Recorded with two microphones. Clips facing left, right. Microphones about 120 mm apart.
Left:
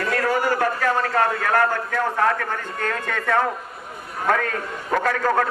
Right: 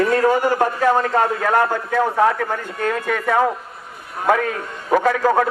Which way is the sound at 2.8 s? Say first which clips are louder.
Right 5 dB; 10° right (ahead or behind).